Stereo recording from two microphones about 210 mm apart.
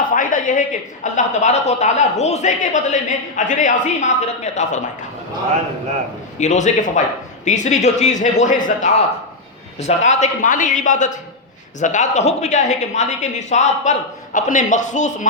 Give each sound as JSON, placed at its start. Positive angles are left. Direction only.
{"t": 0.1, "sound": "a woman's voice", "side_deg": 40}
{"t": 6.4, "sound": "a woman's voice", "side_deg": 35}